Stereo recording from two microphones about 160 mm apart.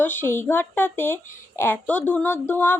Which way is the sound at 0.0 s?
15° left (ahead or behind).